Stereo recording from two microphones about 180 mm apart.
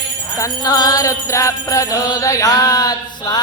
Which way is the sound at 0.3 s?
20° left (ahead or behind).